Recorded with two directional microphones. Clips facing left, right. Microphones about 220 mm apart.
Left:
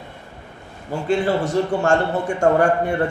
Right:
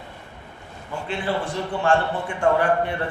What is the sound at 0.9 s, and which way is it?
A man's voice, 45° left (ahead or behind).